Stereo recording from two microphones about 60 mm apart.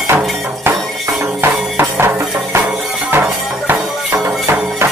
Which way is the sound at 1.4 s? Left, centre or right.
Right.